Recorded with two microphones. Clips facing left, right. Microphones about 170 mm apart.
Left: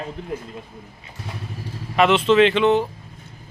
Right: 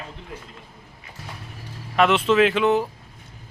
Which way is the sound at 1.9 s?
Centre (ahead or behind).